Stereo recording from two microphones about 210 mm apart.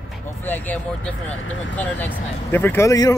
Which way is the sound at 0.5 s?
5° left (ahead or behind).